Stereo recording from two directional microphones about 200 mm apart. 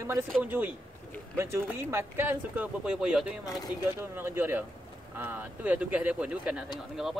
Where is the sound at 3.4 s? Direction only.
20° left (ahead or behind).